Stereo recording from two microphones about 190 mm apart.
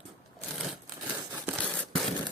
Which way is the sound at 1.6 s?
5° left (ahead or behind).